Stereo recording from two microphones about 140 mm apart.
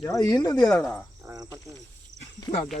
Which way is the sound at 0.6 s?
10° left (ahead or behind).